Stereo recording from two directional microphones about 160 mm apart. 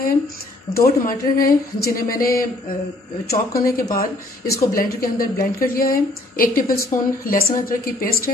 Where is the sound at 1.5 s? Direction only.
70° left (ahead or behind).